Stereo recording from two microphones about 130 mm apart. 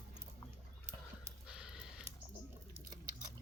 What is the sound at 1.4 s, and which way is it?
Gasp, 5° right (ahead or behind).